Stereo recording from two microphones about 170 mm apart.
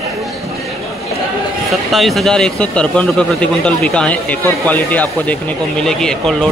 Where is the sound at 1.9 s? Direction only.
Centre (ahead or behind).